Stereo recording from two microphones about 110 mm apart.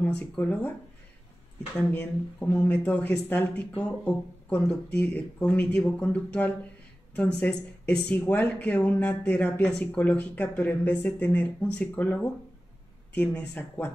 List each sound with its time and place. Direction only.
0.0 s speech: 15° left (ahead or behind)
1.9 s speech: 15° left (ahead or behind)